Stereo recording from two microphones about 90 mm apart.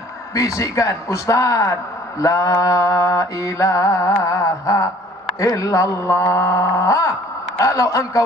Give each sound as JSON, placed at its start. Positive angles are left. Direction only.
{"t": 0.3, "sound": "a man's voice", "side_deg": 40}